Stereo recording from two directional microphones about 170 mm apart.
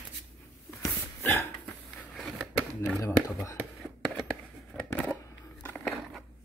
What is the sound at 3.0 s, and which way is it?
Speech, 20° left (ahead or behind).